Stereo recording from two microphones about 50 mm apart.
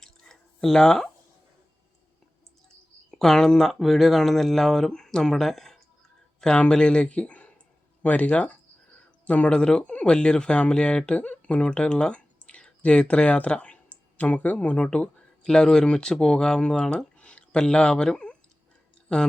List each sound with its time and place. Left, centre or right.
0.0 s drip: centre
3.1 s speech: centre
3.8 s speech: centre
6.4 s speech: centre
14.8 s speech: centre
17.2 s a sound: left
19.1 s speech: centre